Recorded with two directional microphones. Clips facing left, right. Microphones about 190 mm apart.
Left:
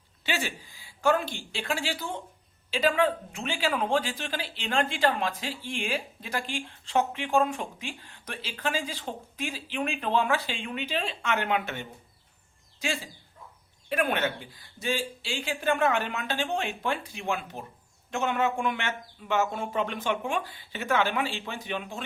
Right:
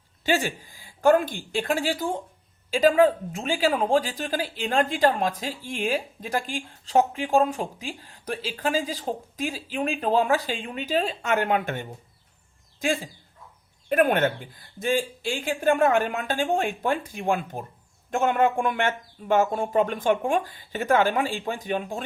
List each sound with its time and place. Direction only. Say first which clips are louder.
0.3 s speech: right 7 dB; 45° right (ahead or behind)